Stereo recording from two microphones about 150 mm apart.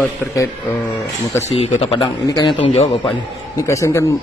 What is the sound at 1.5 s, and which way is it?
A man's voice, 40° left (ahead or behind).